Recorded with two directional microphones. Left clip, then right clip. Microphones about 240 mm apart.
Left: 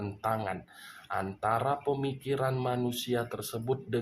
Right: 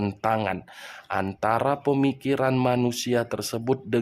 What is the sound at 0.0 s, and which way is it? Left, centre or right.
Speech, right.